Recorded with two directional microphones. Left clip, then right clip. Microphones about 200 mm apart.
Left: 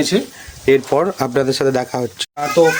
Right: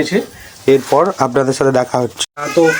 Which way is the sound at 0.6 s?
10° left (ahead or behind).